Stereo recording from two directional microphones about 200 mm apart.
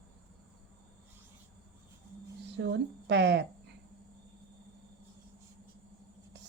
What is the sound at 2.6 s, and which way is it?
Speech, 60° right (ahead or behind).